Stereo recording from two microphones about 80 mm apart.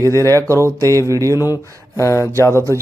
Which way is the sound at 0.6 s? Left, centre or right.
Right.